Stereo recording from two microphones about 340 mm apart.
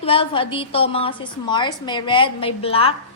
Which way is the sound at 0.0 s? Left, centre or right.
Centre.